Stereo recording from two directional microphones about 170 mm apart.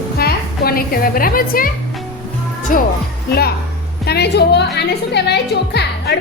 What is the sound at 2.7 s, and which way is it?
Speech, 55° left (ahead or behind).